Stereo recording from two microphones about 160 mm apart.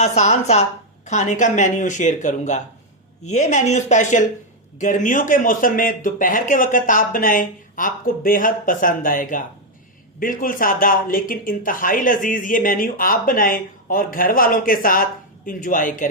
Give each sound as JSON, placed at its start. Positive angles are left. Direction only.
{"t": 0.0, "sound": "speech", "side_deg": 45}